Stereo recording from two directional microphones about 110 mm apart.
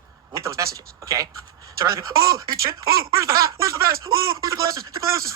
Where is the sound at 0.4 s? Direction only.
30° right (ahead or behind).